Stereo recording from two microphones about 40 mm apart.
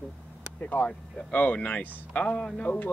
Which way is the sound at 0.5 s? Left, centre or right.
Left.